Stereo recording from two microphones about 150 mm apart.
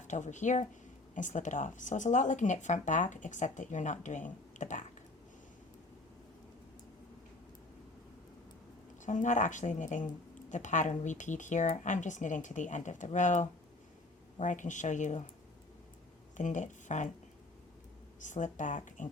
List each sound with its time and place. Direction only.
0.1 s speech: 55° left (ahead or behind)
9.0 s speech: 55° left (ahead or behind)
16.4 s speech: 55° left (ahead or behind)
18.2 s speech: 55° left (ahead or behind)